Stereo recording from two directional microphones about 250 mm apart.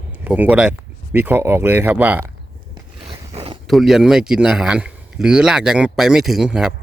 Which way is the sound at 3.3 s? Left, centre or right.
Right.